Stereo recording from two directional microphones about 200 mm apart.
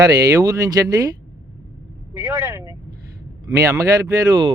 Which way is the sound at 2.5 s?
15° right (ahead or behind).